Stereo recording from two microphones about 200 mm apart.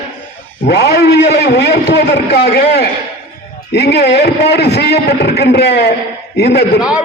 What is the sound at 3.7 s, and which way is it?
A man's voice, 55° left (ahead or behind).